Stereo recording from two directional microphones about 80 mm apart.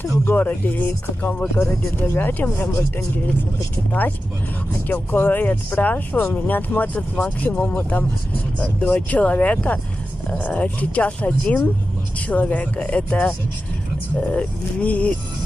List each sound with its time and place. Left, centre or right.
0.0 s speech: left